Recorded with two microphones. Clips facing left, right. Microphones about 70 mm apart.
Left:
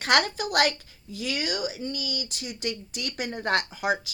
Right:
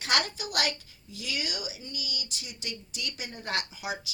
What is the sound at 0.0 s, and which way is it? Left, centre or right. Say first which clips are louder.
A woman's voice: left 6 dB; left.